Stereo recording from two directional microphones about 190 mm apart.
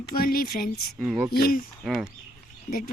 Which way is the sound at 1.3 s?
50° left (ahead or behind).